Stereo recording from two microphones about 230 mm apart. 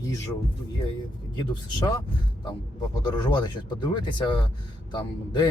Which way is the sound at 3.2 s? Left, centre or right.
Centre.